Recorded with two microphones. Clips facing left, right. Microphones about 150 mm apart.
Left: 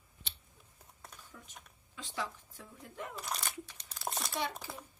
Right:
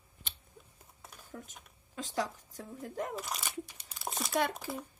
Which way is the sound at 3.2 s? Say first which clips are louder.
Right 1 dB; 5° right (ahead or behind).